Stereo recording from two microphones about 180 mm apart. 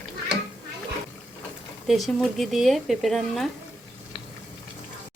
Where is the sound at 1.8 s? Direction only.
Centre (ahead or behind).